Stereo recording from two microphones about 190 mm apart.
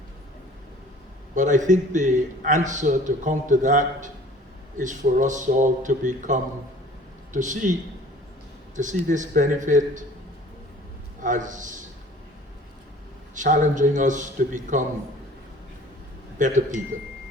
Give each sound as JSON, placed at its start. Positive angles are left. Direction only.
{"t": 1.4, "sound": "a man's voice", "side_deg": -40}
{"t": 8.7, "sound": "a man's voice", "side_deg": -40}
{"t": 11.2, "sound": "a man's voice", "side_deg": -40}
{"t": 13.3, "sound": "a man's voice", "side_deg": -40}
{"t": 16.4, "sound": "a man's voice", "side_deg": -40}